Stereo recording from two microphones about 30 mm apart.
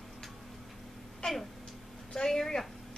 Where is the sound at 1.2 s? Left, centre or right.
Left.